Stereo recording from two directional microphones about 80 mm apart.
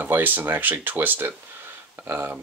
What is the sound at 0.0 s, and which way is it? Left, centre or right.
Speech, right.